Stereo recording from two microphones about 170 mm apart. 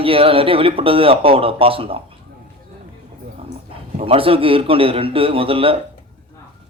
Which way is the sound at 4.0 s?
35° right (ahead or behind).